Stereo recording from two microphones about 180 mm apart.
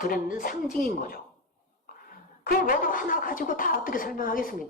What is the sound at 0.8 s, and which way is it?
Speech, 55° left (ahead or behind).